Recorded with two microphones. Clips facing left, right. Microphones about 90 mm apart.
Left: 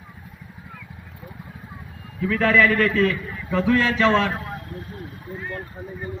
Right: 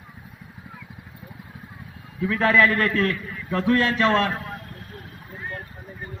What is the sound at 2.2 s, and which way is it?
A man's voice, 15° right (ahead or behind).